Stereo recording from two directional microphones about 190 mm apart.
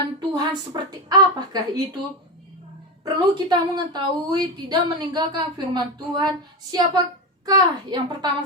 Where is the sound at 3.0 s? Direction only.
20° right (ahead or behind).